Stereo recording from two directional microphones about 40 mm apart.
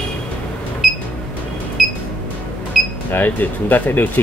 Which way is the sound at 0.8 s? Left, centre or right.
Centre.